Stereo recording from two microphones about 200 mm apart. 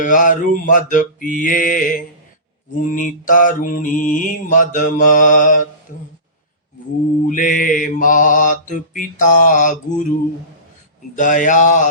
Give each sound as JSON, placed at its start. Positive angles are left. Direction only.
{"t": 0.0, "sound": "mantra", "side_deg": 40}
{"t": 7.3, "sound": "mantra", "side_deg": 45}
{"t": 11.1, "sound": "mantra", "side_deg": 40}